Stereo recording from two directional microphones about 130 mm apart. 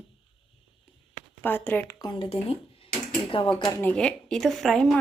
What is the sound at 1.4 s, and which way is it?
Speech, 15° left (ahead or behind).